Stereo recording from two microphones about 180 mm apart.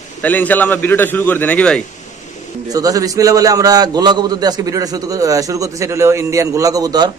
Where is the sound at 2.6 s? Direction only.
20° right (ahead or behind).